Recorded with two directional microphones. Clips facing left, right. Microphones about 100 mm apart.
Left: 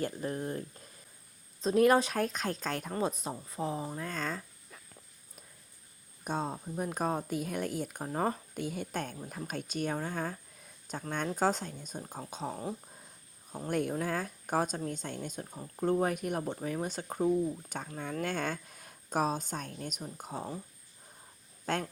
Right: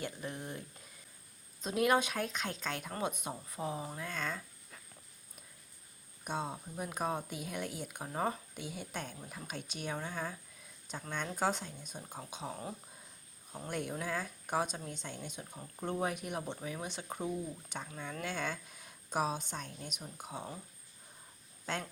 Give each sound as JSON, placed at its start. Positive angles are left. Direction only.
{"t": 0.0, "sound": "speech", "side_deg": 40}
{"t": 1.6, "sound": "speech", "side_deg": 40}
{"t": 4.0, "sound": "speech", "side_deg": 40}
{"t": 6.2, "sound": "speech", "side_deg": 40}
{"t": 13.7, "sound": "speech", "side_deg": 45}